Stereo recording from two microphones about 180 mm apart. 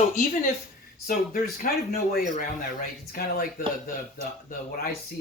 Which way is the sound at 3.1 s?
55° left (ahead or behind).